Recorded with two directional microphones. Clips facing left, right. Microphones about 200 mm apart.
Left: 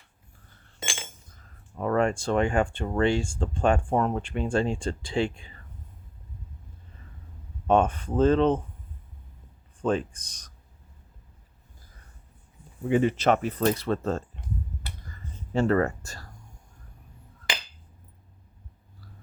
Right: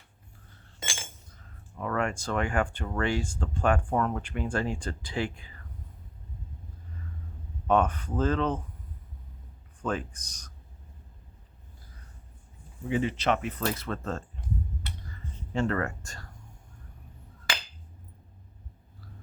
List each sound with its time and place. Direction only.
0.8 s chink: 20° left (ahead or behind)
1.8 s speech: 30° left (ahead or behind)
7.7 s speech: 30° left (ahead or behind)
9.8 s speech: 30° left (ahead or behind)
12.9 s speech: 50° left (ahead or behind)
13.7 s speech: 35° left (ahead or behind)
15.5 s speech: 35° left (ahead or behind)